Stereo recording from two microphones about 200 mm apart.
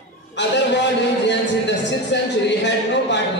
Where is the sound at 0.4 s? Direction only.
60° left (ahead or behind).